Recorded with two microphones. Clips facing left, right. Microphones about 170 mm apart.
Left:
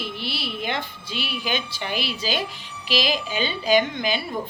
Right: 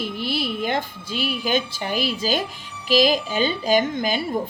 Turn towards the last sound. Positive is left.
turn(degrees=-45)  # may be behind; listen again after turning